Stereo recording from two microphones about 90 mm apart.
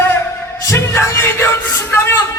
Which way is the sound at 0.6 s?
30° left (ahead or behind).